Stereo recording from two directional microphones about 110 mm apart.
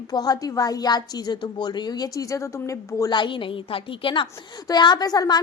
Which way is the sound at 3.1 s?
45° left (ahead or behind).